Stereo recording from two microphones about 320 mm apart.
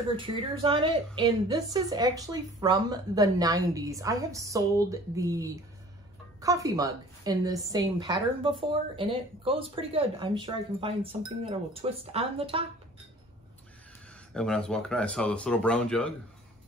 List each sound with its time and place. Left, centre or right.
0.1 s a woman's voice: centre
14.3 s speech: centre